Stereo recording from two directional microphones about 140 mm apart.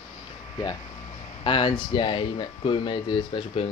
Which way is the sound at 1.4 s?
35° left (ahead or behind).